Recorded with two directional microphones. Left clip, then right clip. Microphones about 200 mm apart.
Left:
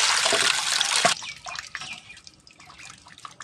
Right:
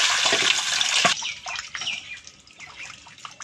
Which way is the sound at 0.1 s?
20° left (ahead or behind).